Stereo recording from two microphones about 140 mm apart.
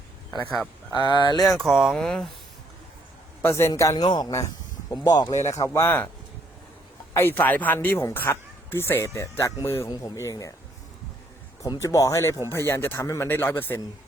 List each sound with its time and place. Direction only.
0.5 s speech: 5° left (ahead or behind)
0.9 s speech: 30° left (ahead or behind)
1.4 s speech: centre (ahead or behind)
3.4 s speech: 20° left (ahead or behind)
7.1 s speech: 15° left (ahead or behind)
11.6 s speech: 25° left (ahead or behind)